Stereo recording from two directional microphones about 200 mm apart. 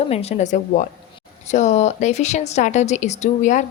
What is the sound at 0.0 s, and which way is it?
Speech, 30° left (ahead or behind).